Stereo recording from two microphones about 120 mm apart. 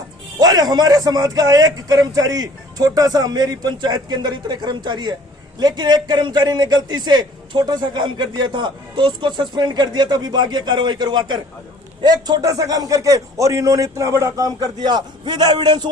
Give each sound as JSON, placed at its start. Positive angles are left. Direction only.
{"t": 0.3, "sound": "a man's voice", "side_deg": -35}